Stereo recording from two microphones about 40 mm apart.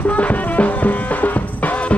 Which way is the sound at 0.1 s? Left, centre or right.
Left.